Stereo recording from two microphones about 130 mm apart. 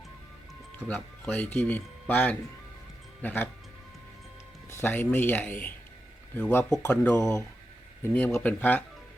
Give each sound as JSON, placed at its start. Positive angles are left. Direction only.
{"t": 0.8, "sound": "speech", "side_deg": 15}
{"t": 4.7, "sound": "speech", "side_deg": 15}
{"t": 7.1, "sound": "speech", "side_deg": 25}